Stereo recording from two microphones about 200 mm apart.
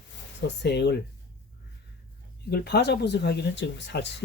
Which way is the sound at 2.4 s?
55° left (ahead or behind).